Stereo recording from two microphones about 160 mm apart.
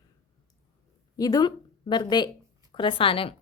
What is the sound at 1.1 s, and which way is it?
A woman's voice, 25° left (ahead or behind).